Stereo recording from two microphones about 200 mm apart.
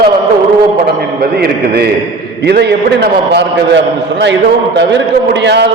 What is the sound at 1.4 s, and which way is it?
A man's voice, 55° right (ahead or behind).